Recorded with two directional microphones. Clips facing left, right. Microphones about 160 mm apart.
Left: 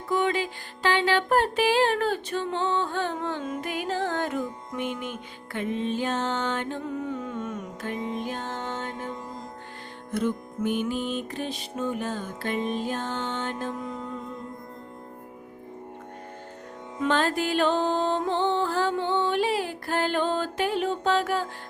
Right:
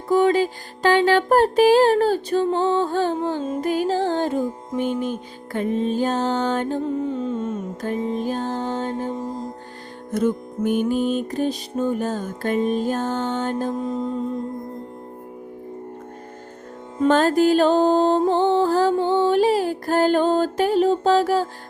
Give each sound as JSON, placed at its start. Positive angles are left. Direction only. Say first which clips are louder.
{"t": 0.1, "sound": "music", "louder": "right 8 dB", "side_deg": -40}
{"t": 7.8, "sound": "music", "louder": "right 6 dB", "side_deg": -40}
{"t": 17.0, "sound": "music", "louder": "right 8 dB", "side_deg": -40}